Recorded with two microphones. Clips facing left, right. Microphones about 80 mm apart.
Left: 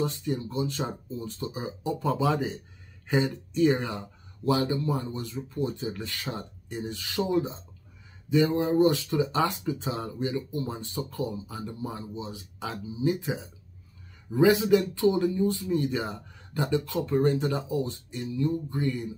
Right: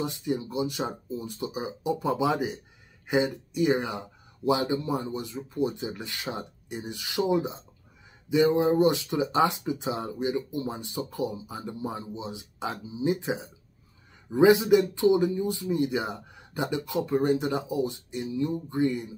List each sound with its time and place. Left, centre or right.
0.0 s speech: centre